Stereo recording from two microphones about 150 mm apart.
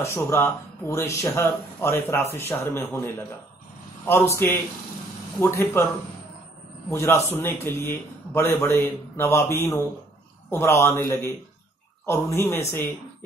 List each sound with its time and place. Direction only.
0.0 s speech: 20° left (ahead or behind)
6.9 s speech: 20° left (ahead or behind)